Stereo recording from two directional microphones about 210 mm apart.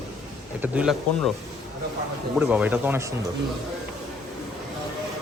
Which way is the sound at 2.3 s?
5° right (ahead or behind).